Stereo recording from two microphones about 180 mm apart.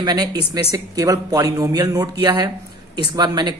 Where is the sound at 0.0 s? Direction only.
20° right (ahead or behind).